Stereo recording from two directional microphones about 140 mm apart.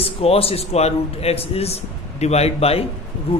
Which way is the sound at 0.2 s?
45° left (ahead or behind).